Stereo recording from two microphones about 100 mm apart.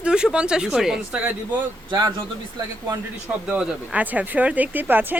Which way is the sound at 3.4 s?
10° right (ahead or behind).